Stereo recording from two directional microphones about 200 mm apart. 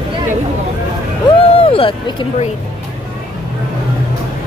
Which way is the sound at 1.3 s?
20° left (ahead or behind).